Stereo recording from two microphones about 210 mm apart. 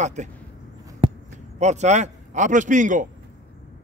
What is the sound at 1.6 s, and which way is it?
A man's voice, 35° right (ahead or behind).